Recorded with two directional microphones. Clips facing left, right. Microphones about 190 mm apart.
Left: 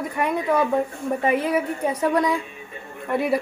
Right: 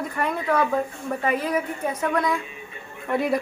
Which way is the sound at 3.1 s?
5° left (ahead or behind).